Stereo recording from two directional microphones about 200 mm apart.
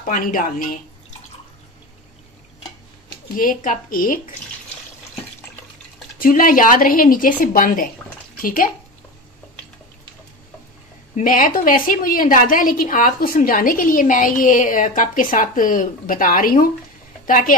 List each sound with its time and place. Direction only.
0.0 s a woman's voice: 45° left (ahead or behind)
3.3 s a woman's voice: 45° left (ahead or behind)
6.1 s a woman's voice: 45° left (ahead or behind)
11.1 s a woman's voice: 40° left (ahead or behind)